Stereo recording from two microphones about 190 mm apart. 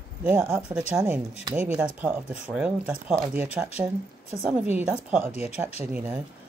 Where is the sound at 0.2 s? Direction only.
10° right (ahead or behind).